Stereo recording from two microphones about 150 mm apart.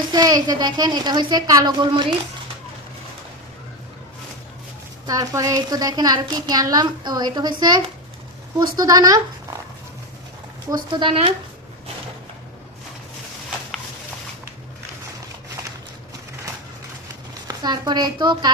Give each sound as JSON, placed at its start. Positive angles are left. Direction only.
{"t": 0.1, "sound": "a woman's voice", "side_deg": -25}
{"t": 5.0, "sound": "a woman's voice", "side_deg": -25}
{"t": 11.0, "sound": "speech", "side_deg": -40}
{"t": 17.5, "sound": "a woman's voice", "side_deg": -30}